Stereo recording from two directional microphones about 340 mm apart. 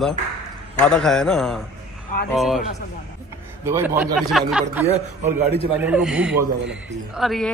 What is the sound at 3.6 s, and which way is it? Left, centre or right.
A man's voice, centre.